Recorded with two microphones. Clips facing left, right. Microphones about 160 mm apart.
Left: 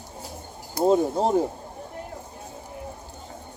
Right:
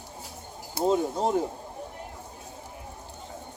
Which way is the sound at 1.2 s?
30° left (ahead or behind).